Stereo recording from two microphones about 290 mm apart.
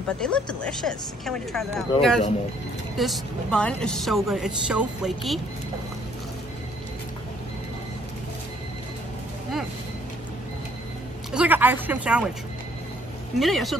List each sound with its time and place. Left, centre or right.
0.2 s a woman's voice: centre
11.3 s speech: centre
13.4 s a woman's voice: centre